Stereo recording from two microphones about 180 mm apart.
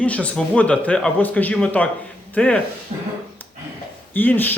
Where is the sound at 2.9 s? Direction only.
35° right (ahead or behind).